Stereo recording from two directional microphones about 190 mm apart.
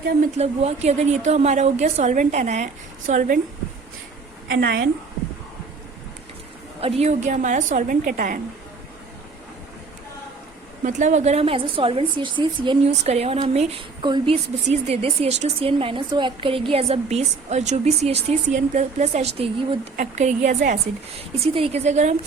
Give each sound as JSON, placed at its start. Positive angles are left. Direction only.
{"t": 0.3, "sound": "a woman's voice", "side_deg": -35}
{"t": 4.4, "sound": "a woman's voice", "side_deg": -55}
{"t": 6.8, "sound": "a woman's voice", "side_deg": -35}
{"t": 10.8, "sound": "a woman's voice", "side_deg": -40}
{"t": 21.3, "sound": "a woman's voice", "side_deg": -30}